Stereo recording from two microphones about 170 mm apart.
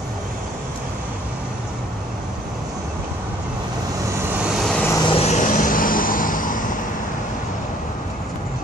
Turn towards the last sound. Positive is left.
turn(degrees=50)  # may be behind; listen again after turning